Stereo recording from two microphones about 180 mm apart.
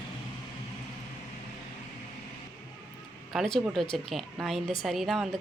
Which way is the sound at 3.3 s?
Centre (ahead or behind).